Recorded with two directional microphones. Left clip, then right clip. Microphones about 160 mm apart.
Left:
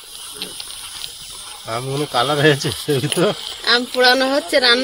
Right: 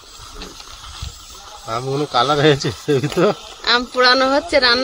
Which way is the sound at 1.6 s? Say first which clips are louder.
Right 2 dB; centre (ahead or behind).